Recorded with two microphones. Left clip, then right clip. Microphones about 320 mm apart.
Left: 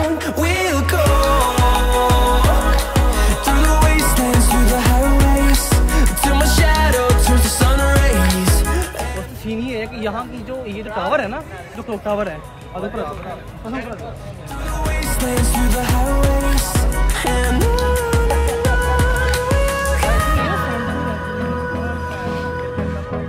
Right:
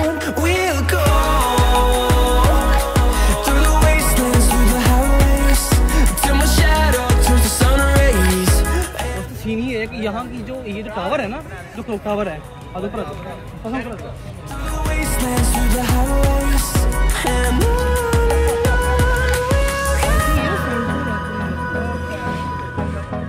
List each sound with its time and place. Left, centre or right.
0.2 s music: centre
9.5 s music: left
11.9 s speech: centre
14.8 s music: centre